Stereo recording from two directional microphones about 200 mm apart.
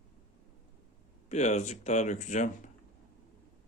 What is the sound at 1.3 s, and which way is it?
Speech, 35° left (ahead or behind).